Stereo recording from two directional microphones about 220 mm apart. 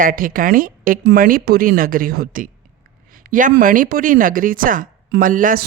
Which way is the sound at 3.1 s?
40° right (ahead or behind).